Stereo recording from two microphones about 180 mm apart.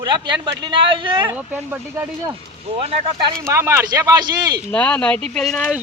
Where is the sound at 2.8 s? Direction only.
30° right (ahead or behind).